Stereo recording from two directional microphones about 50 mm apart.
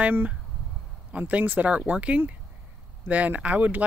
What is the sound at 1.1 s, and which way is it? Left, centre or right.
Speech, right.